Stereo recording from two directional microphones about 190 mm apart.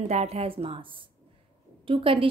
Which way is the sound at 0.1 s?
35° right (ahead or behind).